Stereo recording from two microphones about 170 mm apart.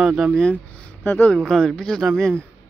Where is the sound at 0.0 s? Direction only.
5° right (ahead or behind).